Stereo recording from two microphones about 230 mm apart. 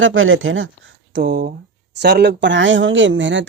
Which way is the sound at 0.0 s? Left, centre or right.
Right.